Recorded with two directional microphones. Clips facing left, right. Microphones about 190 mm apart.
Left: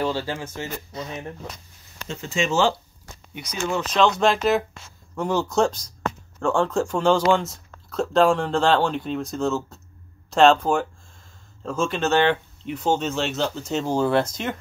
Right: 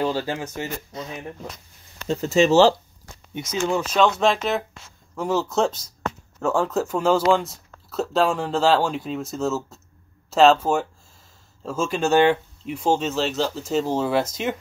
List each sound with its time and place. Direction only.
0.3 s speech: 15° right (ahead or behind)
2.0 s speech: 35° right (ahead or behind)
3.6 s speech: 10° right (ahead or behind)